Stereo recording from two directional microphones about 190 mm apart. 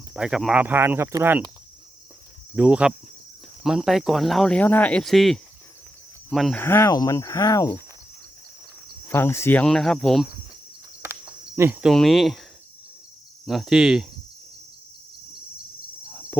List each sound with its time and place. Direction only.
0.1 s speech: 5° right (ahead or behind)
2.6 s speech: 5° right (ahead or behind)
6.6 s speech: 15° left (ahead or behind)
9.0 s speech: 10° left (ahead or behind)
11.0 s cricket: 15° right (ahead or behind)
13.4 s speech: centre (ahead or behind)